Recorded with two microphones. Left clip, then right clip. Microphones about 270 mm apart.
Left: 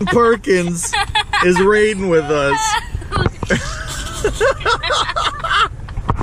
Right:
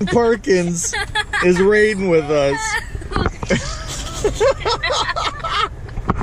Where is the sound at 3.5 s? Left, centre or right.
Centre.